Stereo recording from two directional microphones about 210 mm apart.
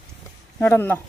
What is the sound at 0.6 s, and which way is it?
Speech, 10° left (ahead or behind).